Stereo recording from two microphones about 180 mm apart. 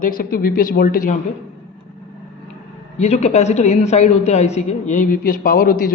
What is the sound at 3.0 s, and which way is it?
A woman's voice, 40° left (ahead or behind).